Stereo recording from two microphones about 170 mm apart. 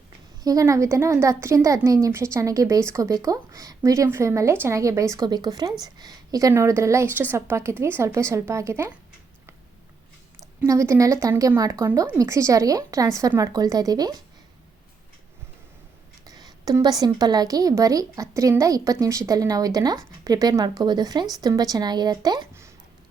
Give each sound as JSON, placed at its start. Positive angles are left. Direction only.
{"t": 0.4, "sound": "a woman's voice", "side_deg": -20}
{"t": 10.6, "sound": "a woman's voice", "side_deg": -15}
{"t": 16.2, "sound": "a woman's voice", "side_deg": -20}